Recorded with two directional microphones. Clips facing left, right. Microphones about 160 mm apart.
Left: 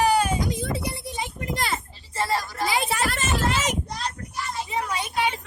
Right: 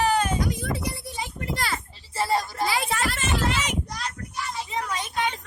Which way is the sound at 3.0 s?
40° left (ahead or behind).